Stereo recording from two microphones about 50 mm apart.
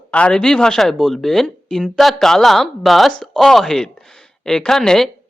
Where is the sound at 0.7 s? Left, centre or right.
Centre.